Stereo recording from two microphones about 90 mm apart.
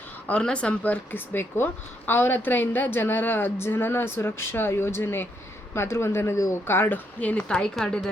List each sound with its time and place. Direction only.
0.3 s speech: 10° left (ahead or behind)